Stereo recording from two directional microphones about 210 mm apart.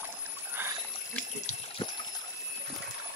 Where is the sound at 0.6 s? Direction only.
10° right (ahead or behind).